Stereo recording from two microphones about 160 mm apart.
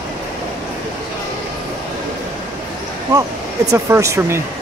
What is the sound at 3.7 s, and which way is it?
Speech, 20° right (ahead or behind).